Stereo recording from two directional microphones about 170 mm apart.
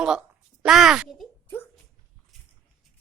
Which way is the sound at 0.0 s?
5° right (ahead or behind).